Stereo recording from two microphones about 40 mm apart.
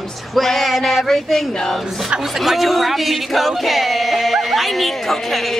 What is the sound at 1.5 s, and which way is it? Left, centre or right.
Speech, centre.